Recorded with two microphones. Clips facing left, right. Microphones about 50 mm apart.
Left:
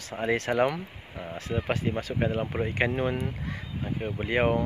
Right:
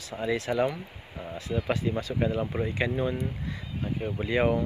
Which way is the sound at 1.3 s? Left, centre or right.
Left.